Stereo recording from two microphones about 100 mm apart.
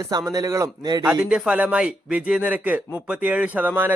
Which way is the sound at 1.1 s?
10° right (ahead or behind).